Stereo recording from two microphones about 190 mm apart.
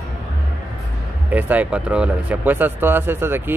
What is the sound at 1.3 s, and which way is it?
Speech, 10° right (ahead or behind).